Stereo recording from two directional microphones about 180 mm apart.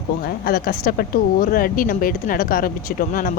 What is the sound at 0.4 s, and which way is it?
Speech, 55° left (ahead or behind).